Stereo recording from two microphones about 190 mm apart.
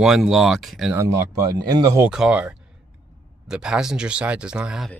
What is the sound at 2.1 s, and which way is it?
Speech, 5° right (ahead or behind).